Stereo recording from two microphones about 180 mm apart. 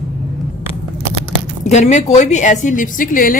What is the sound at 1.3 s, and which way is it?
Speech, 40° left (ahead or behind).